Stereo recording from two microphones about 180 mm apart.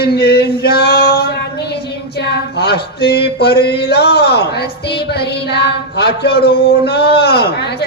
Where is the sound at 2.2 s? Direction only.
65° left (ahead or behind).